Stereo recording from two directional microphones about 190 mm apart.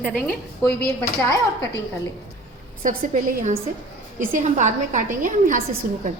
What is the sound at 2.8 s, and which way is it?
A woman's voice, 45° right (ahead or behind).